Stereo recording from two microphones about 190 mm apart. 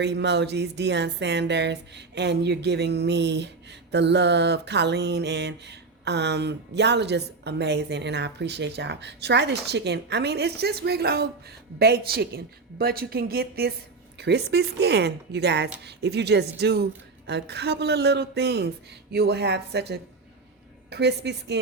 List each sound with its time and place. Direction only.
0.0 s speech: 65° right (ahead or behind)